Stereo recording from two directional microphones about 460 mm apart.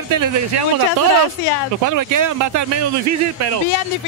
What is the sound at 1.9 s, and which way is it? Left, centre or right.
Speech, right.